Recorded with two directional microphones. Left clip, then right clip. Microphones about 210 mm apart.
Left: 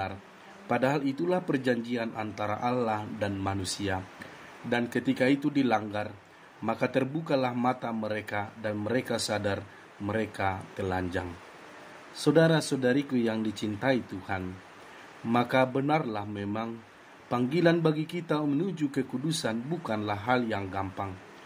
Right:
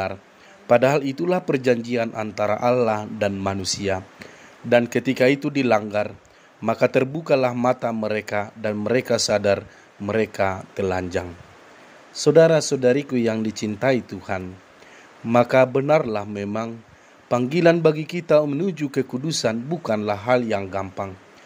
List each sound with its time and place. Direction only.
0.7 s a man's voice: 40° right (ahead or behind)